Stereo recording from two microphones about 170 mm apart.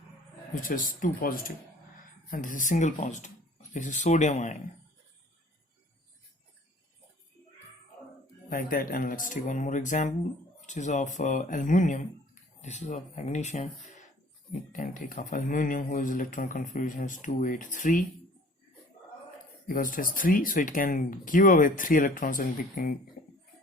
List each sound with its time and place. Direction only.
0.6 s speech: 55° left (ahead or behind)
8.4 s speech: 55° left (ahead or behind)
14.7 s speech: 50° left (ahead or behind)
19.6 s speech: 55° left (ahead or behind)